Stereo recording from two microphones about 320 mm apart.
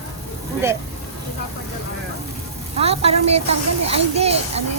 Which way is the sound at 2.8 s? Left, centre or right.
Centre.